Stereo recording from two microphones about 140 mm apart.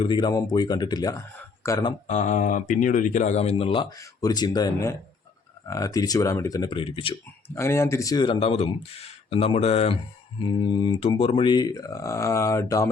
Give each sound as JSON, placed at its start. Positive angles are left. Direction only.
{"t": 0.0, "sound": "speech", "side_deg": 35}
{"t": 2.0, "sound": "speech", "side_deg": 55}
{"t": 3.8, "sound": "speech", "side_deg": 25}
{"t": 7.4, "sound": "speech", "side_deg": 20}